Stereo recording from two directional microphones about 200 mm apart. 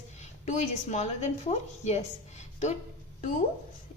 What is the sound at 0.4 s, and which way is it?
A woman's voice, 35° left (ahead or behind).